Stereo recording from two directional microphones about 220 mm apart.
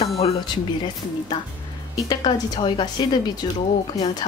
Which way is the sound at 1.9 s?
20° left (ahead or behind).